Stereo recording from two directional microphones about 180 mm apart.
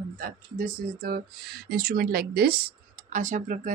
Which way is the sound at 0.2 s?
50° right (ahead or behind).